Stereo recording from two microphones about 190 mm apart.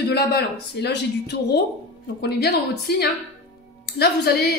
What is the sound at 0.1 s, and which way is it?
A woman's voice, 60° left (ahead or behind).